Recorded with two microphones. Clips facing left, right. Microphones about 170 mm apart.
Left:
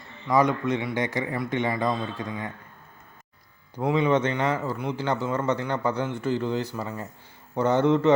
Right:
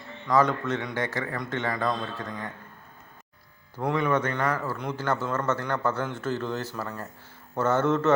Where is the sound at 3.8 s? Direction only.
5° left (ahead or behind).